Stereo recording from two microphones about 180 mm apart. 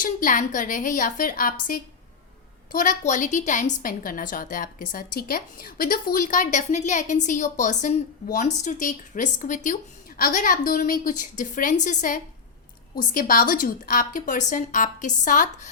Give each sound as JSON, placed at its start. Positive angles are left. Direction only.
{"t": 0.0, "sound": "a woman's voice", "side_deg": 50}
{"t": 2.7, "sound": "a woman's voice", "side_deg": 45}